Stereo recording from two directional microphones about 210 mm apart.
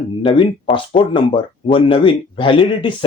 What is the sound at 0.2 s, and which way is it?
Speech, 25° left (ahead or behind).